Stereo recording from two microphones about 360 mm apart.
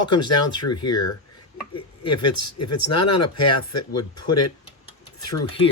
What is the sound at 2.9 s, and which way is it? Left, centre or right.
Speech, left.